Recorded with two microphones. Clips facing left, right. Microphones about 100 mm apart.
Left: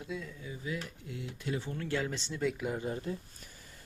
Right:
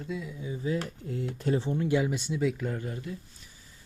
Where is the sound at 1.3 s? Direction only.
40° right (ahead or behind).